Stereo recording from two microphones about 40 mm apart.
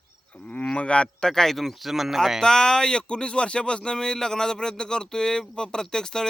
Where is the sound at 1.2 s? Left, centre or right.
Centre.